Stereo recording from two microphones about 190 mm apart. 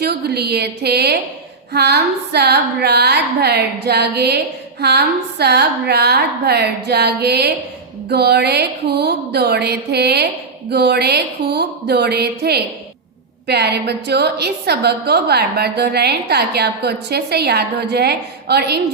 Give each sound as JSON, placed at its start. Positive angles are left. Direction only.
{"t": 0.0, "sound": "a woman's voice", "side_deg": -60}